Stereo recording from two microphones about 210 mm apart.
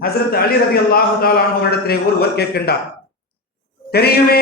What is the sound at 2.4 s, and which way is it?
Speech, 50° left (ahead or behind).